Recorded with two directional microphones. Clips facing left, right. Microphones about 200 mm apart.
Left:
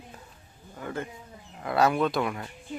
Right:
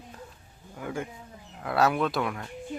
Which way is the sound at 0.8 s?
10° right (ahead or behind).